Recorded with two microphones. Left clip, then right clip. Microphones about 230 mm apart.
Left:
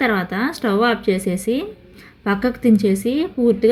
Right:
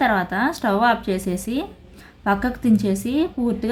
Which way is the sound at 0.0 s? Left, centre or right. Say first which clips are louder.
Even; centre.